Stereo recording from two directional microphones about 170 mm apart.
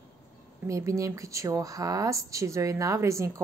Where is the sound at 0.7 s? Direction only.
15° right (ahead or behind).